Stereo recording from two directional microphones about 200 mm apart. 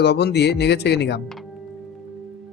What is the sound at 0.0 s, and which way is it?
Speech, 55° left (ahead or behind).